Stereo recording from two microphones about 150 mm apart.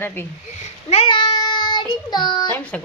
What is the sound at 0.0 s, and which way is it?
Speech, 15° left (ahead or behind).